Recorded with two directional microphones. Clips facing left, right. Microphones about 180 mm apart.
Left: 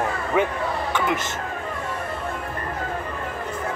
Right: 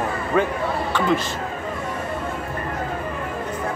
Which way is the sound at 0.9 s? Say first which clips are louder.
Right 5 dB; 20° left (ahead or behind).